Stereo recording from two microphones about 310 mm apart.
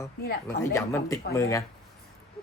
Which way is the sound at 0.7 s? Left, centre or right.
Centre.